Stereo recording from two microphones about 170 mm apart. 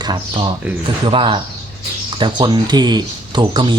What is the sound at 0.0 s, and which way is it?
Speech, 25° right (ahead or behind).